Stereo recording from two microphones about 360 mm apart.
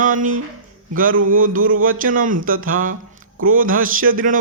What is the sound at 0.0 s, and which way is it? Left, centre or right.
Speech, right.